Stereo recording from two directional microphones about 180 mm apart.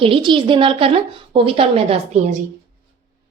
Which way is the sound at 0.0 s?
30° right (ahead or behind).